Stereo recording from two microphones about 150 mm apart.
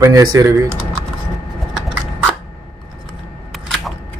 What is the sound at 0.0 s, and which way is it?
Speech, 20° right (ahead or behind).